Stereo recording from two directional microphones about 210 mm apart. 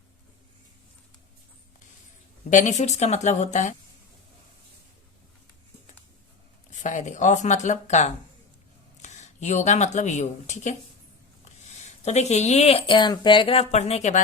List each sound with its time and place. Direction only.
2.5 s speech: 35° left (ahead or behind)
6.7 s speech: 35° left (ahead or behind)
11.8 s speech: 35° left (ahead or behind)